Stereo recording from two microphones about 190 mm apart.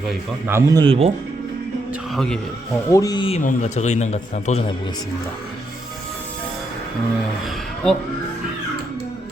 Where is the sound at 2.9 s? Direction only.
20° left (ahead or behind); by 4.6 s 35° left (ahead or behind).